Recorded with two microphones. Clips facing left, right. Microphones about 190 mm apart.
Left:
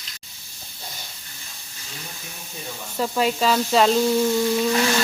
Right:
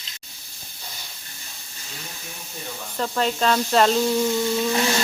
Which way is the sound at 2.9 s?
10° left (ahead or behind).